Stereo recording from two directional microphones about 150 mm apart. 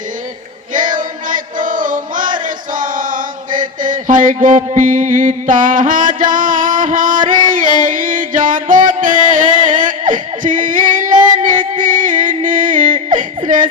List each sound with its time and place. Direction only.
0.7 s music: 60° right (ahead or behind)